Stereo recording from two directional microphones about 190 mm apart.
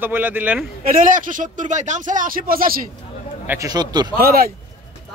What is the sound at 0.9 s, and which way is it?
Speech, 45° right (ahead or behind).